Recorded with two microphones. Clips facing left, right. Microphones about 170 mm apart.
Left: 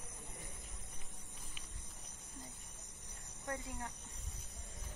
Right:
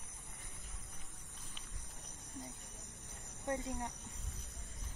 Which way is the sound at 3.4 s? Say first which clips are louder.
Right 5 dB; 20° right (ahead or behind).